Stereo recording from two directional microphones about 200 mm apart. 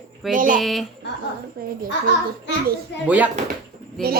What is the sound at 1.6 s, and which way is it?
Speech, 45° right (ahead or behind).